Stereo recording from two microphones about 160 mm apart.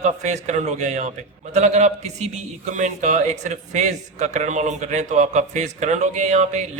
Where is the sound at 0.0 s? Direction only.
45° right (ahead or behind).